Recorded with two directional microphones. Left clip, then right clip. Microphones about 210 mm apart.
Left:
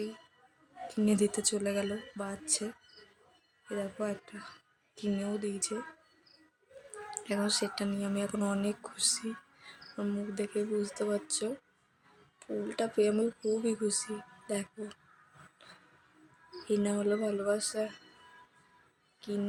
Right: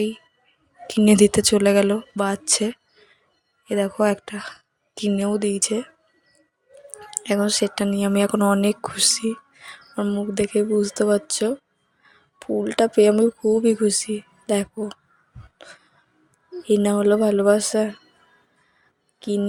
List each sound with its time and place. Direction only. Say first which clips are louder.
0.9 s speech: right 14 dB; 45° right (ahead or behind)
7.1 s speech: right 11 dB; 40° right (ahead or behind)
16.6 s speech: right 13 dB; 40° right (ahead or behind)
19.2 s speech: right 13 dB; 40° right (ahead or behind)